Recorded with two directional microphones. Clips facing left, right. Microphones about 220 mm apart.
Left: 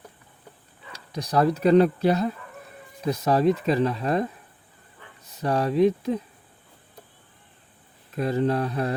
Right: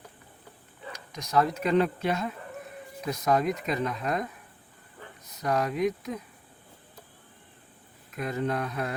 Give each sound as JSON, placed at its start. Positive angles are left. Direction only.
{"t": 0.9, "sound": "speech", "side_deg": 35}
{"t": 5.4, "sound": "speech", "side_deg": 30}
{"t": 8.1, "sound": "speech", "side_deg": 30}